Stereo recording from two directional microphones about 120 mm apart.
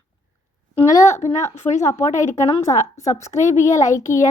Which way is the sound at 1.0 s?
75° left (ahead or behind).